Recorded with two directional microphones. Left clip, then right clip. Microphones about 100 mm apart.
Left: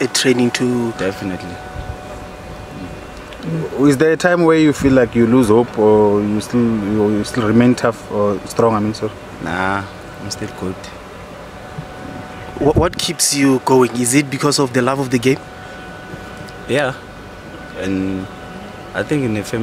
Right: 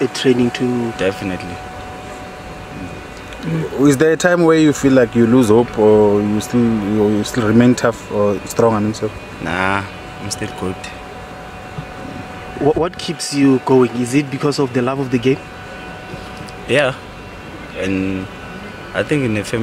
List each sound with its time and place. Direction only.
0.0 s speech: 60° left (ahead or behind)
0.9 s speech: centre (ahead or behind)
3.8 s speech: 5° right (ahead or behind)
12.6 s speech: 60° left (ahead or behind)
16.6 s speech: centre (ahead or behind)